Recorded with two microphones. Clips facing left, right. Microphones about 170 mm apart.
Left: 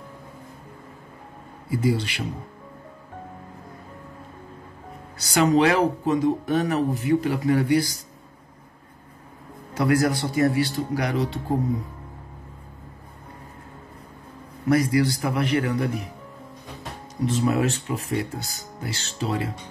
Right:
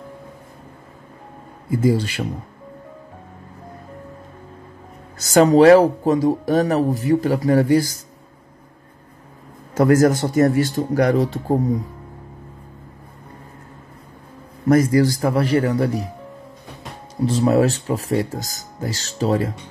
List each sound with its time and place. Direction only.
1.7 s speech: 45° right (ahead or behind)
5.2 s speech: 40° right (ahead or behind)
9.8 s speech: 45° right (ahead or behind)
14.7 s speech: 45° right (ahead or behind)
17.2 s speech: 35° right (ahead or behind)